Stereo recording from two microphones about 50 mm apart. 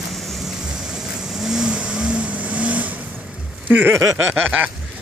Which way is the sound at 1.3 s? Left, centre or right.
Centre.